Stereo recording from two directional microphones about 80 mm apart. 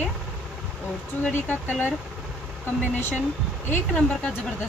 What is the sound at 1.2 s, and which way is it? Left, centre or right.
Speech, centre.